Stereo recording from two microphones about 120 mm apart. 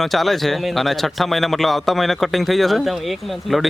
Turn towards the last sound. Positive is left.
turn(degrees=0)  # may be behind; listen again after turning